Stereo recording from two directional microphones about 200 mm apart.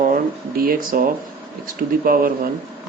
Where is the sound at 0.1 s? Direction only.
45° right (ahead or behind).